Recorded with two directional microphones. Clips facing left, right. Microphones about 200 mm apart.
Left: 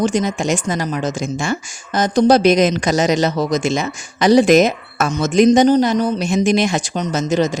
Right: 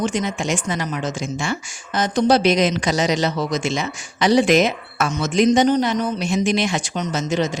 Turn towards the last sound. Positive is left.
turn(degrees=40)  # may be behind; listen again after turning